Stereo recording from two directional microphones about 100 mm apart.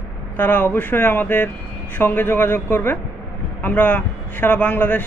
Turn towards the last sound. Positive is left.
turn(degrees=15)  # may be behind; listen again after turning